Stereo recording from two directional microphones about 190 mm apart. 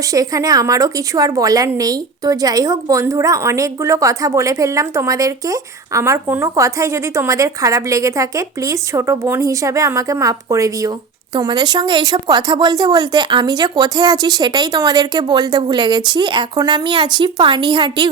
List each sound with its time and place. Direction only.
0.1 s a woman's voice: 20° right (ahead or behind)